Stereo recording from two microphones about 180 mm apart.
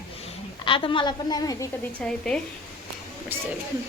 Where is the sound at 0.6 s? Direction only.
30° left (ahead or behind).